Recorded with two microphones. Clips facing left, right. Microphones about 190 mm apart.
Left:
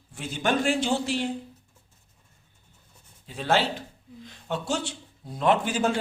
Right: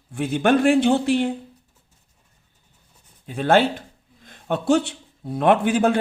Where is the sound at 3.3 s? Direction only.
55° right (ahead or behind).